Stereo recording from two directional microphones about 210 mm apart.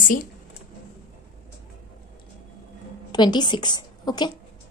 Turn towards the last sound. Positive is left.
turn(degrees=20)  # may be behind; listen again after turning